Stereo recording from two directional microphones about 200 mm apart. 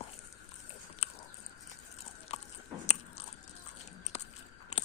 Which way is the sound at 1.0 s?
30° left (ahead or behind).